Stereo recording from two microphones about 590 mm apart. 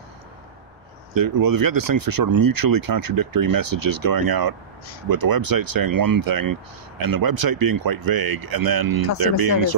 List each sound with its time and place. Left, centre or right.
1.1 s speech: right